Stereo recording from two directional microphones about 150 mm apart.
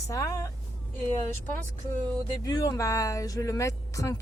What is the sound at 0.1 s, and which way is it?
Speech, 20° left (ahead or behind).